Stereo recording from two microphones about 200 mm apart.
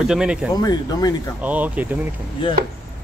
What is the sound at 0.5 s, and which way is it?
Speech, 20° left (ahead or behind).